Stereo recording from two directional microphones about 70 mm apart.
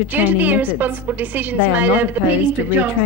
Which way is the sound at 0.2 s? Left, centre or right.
Right.